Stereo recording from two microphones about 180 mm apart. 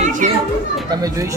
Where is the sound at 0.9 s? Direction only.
20° right (ahead or behind).